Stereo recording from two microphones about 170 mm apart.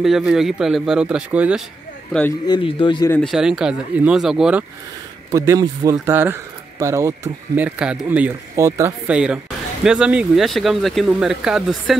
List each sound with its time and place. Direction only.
0.0 s speech: 5° right (ahead or behind)
2.4 s speech: 25° left (ahead or behind)
3.1 s speech: 5° left (ahead or behind)
5.3 s speech: 20° right (ahead or behind); by 12.0 s centre (ahead or behind)